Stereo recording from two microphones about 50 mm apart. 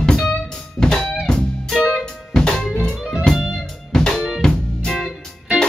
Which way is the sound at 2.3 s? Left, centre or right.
Centre.